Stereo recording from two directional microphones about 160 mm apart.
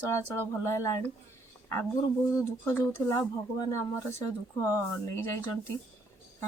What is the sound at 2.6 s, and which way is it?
Speech, 15° left (ahead or behind).